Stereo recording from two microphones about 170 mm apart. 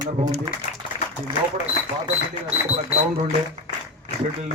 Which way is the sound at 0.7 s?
45° left (ahead or behind).